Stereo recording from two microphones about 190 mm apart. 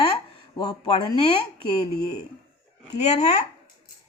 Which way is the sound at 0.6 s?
20° left (ahead or behind).